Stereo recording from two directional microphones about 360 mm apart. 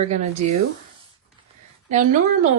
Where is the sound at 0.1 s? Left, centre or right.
Centre.